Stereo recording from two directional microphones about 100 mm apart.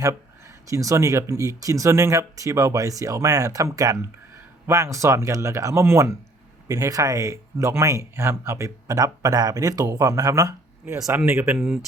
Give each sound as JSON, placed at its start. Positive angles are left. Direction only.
{"t": 0.7, "sound": "speech", "side_deg": -35}
{"t": 11.3, "sound": "speech", "side_deg": -25}